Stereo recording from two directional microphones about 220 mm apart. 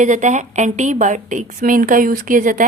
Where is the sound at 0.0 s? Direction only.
35° right (ahead or behind).